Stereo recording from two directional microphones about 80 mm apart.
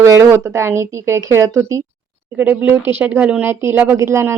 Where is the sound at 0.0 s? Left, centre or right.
Right.